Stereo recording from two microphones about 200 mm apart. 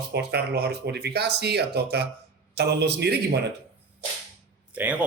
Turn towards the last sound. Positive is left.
turn(degrees=-5)  # may be behind; listen again after turning